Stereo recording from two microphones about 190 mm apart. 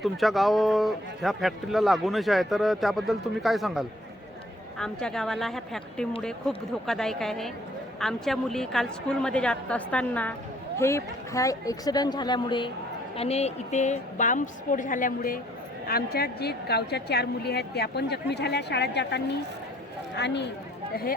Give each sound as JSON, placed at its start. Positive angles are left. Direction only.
{"t": 0.0, "sound": "a woman's voice", "side_deg": 0}